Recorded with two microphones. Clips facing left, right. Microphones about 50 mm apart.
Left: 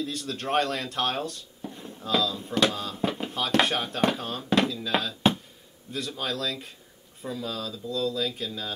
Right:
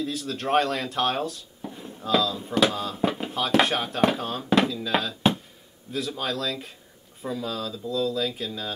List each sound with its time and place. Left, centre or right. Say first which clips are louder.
0.0 s speech: right 3 dB; centre